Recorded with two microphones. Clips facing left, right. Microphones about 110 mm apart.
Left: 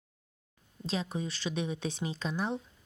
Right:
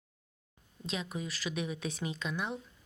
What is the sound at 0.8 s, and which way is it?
Speech, 35° left (ahead or behind).